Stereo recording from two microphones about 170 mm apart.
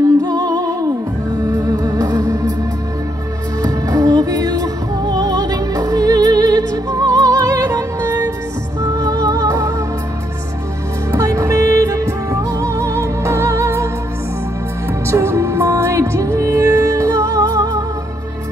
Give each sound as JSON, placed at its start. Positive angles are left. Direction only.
{"t": 0.2, "sound": "music", "side_deg": -20}
{"t": 3.6, "sound": "music", "side_deg": -20}
{"t": 11.1, "sound": "music", "side_deg": -20}
{"t": 15.0, "sound": "music", "side_deg": -15}